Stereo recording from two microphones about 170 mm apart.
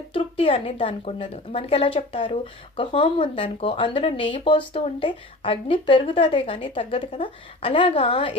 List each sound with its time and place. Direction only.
0.1 s a woman's voice: 30° left (ahead or behind)